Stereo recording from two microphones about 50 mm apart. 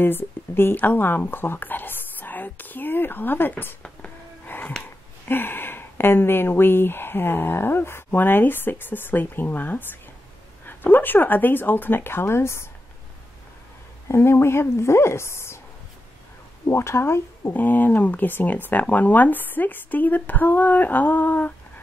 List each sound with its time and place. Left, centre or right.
0.0 s a woman's voice: left
4.5 s music: left
5.3 s speech: left
14.0 s speech: left
16.6 s speech: left
17.5 s speech: left